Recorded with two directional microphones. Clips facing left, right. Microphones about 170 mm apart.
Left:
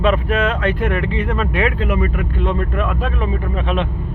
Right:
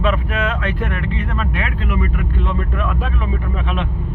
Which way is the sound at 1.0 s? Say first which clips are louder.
Left 3 dB; 90° left.